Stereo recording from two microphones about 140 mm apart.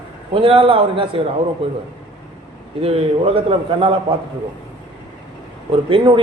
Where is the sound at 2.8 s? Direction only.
45° right (ahead or behind).